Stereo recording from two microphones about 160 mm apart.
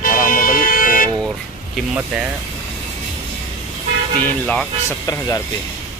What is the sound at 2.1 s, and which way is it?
Speech, 5° right (ahead or behind).